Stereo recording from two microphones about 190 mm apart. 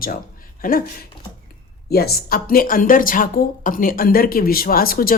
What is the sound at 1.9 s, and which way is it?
Speech, 55° left (ahead or behind).